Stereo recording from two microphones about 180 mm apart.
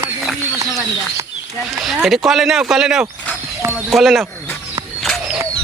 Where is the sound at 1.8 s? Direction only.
Centre (ahead or behind).